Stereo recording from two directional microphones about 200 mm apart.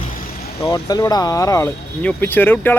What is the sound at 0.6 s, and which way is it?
Speech, 20° left (ahead or behind).